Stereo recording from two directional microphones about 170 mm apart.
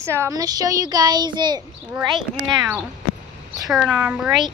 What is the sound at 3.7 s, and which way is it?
Speech, 5° right (ahead or behind).